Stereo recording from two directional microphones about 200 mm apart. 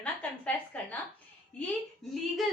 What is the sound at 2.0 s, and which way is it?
Speech, centre (ahead or behind).